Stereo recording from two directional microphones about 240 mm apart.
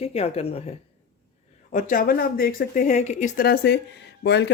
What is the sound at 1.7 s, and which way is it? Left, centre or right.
Speech, left.